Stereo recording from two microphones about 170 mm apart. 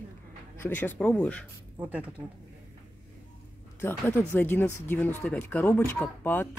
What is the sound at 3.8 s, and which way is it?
Speech, 15° left (ahead or behind).